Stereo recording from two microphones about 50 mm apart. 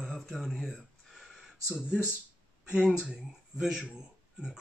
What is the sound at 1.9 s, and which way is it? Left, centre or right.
Speech, centre.